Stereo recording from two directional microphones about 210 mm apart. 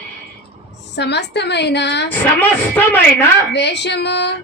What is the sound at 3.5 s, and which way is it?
Speech, 55° left (ahead or behind).